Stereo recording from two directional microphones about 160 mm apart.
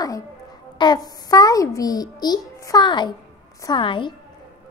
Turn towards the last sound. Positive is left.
turn(degrees=30)  # may be behind; listen again after turning